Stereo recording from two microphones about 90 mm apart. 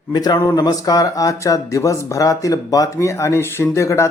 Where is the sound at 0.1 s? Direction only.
50° left (ahead or behind).